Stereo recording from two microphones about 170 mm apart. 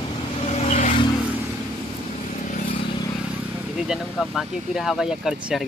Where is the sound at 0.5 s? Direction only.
40° left (ahead or behind).